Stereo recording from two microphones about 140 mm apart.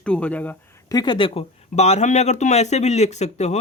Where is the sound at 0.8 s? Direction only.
30° left (ahead or behind).